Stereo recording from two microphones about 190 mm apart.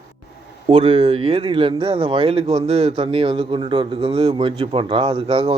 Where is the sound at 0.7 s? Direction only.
30° right (ahead or behind).